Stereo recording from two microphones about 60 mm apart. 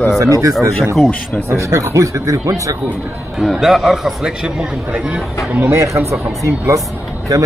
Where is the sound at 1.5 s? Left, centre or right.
Right.